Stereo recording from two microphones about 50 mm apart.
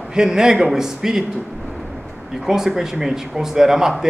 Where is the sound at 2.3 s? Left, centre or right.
Centre.